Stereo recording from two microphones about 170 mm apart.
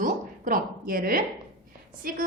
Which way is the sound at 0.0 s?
55° right (ahead or behind).